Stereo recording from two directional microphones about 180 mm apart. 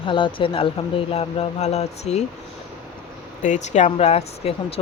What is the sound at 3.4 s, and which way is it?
A woman's voice, 40° left (ahead or behind).